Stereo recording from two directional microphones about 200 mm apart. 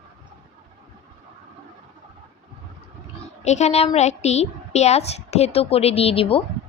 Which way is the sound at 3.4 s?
35° left (ahead or behind).